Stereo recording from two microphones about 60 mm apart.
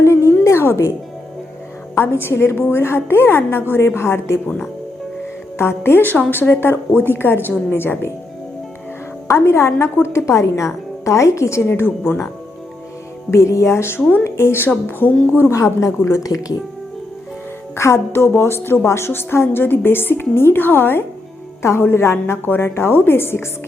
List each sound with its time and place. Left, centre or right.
0.0 s a sound: left
0.4 s music: left
2.0 s a woman's voice: left
5.5 s a woman's voice: left
9.2 s a woman's voice: left
11.6 s a woman's voice: left
13.3 s a woman's voice: left
15.5 s a woman's voice: left
16.1 s speech: left
17.7 s a woman's voice: left